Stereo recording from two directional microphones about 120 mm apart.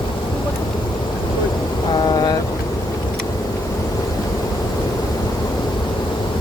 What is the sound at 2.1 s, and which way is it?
Boat, 35° left (ahead or behind).